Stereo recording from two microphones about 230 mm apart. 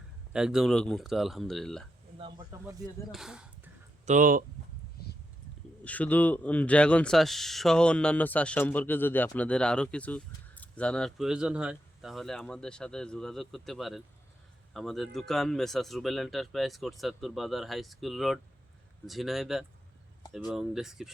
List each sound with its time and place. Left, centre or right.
0.3 s speech: centre
2.1 s speech: centre
3.1 s speech: centre
4.0 s speech: right
5.8 s speech: centre